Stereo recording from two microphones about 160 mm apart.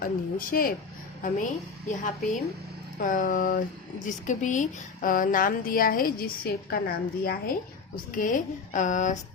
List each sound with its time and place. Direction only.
0.0 s a woman's voice: 65° left (ahead or behind)
1.9 s a woman's voice: 50° left (ahead or behind)